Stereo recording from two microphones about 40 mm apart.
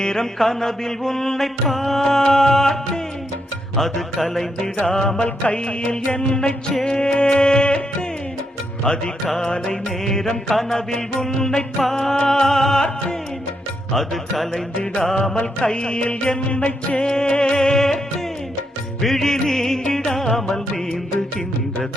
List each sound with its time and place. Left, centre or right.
0.0 s music: centre
4.9 s music: centre
9.4 s music: centre
13.9 s music: centre
15.1 s music: centre
17.1 s music: centre
19.0 s music: centre